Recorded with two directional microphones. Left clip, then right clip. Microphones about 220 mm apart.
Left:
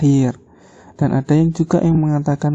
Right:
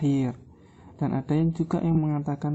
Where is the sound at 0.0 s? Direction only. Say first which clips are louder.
Left 10 dB; 30° left (ahead or behind).